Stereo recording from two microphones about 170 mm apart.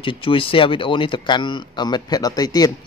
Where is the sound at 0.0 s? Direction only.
30° left (ahead or behind).